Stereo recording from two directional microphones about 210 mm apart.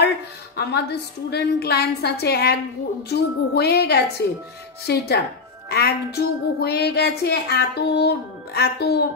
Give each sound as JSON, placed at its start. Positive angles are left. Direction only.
{"t": 0.6, "sound": "a woman's voice", "side_deg": 50}